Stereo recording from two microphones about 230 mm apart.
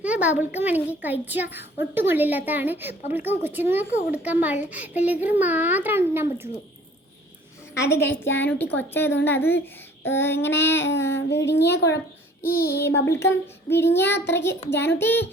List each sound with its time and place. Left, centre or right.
0.0 s a child's voice: centre
7.7 s child singing: centre
11.3 s speech: left
13.1 s child singing: centre
14.7 s speech: left
14.9 s child singing: centre